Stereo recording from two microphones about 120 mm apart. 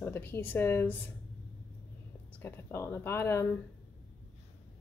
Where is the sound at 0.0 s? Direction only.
20° left (ahead or behind).